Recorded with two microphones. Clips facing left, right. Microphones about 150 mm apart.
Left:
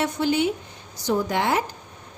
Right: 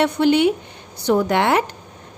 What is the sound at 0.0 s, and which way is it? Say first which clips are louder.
A woman's voice: right 7 dB; 65° right (ahead or behind).